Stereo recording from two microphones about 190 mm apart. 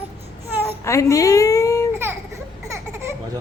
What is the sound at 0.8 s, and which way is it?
Baby cry, 15° left (ahead or behind).